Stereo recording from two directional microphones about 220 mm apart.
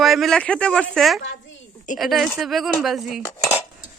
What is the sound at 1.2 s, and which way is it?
Speech, 55° left (ahead or behind).